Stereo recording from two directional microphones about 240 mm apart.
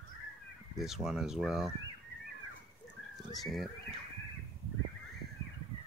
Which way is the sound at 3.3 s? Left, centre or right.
Centre.